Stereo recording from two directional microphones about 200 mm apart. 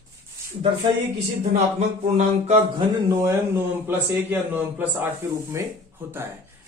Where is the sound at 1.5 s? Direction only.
35° right (ahead or behind).